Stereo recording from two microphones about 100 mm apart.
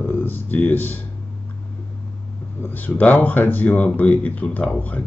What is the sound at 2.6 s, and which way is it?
Speech, 20° left (ahead or behind).